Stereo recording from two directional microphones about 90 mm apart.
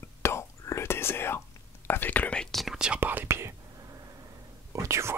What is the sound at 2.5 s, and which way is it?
Whispering, 5° right (ahead or behind).